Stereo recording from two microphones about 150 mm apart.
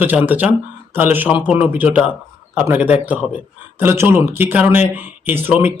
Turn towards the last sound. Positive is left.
turn(degrees=-15)  # may be behind; listen again after turning